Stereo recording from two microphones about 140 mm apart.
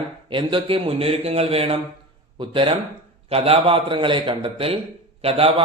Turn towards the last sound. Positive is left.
turn(degrees=-45)  # may be behind; listen again after turning